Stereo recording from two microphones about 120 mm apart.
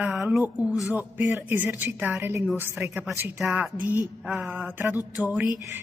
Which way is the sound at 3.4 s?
5° right (ahead or behind).